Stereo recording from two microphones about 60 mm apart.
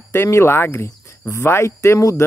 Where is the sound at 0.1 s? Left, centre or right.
Left.